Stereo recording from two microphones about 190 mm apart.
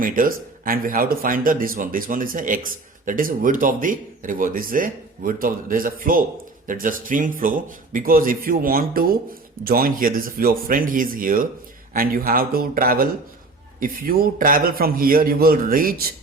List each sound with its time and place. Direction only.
0.0 s speech: 45° right (ahead or behind)